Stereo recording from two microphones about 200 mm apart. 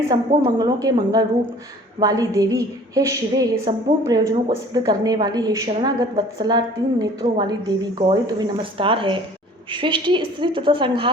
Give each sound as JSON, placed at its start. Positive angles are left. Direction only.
{"t": 0.1, "sound": "a woman's voice", "side_deg": -20}